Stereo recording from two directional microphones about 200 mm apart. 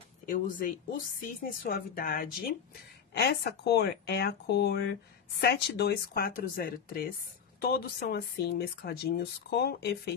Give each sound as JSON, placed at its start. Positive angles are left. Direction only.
{"t": 0.3, "sound": "speech", "side_deg": 45}